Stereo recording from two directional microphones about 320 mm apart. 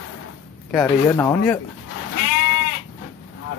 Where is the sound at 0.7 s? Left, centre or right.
Centre.